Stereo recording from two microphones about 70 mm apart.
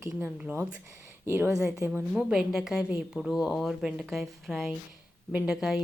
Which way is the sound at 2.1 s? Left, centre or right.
Centre.